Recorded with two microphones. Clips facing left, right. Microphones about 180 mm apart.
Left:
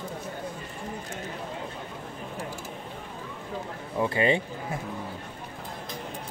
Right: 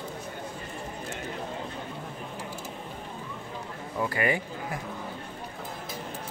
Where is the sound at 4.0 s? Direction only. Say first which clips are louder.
Left 3 dB; 25° left (ahead or behind).